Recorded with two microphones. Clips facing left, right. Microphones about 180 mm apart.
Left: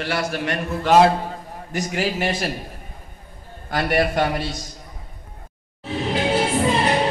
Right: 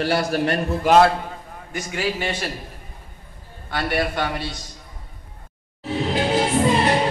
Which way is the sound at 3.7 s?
45° left (ahead or behind).